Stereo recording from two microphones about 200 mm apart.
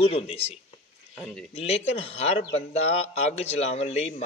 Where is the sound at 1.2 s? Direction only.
Centre (ahead or behind).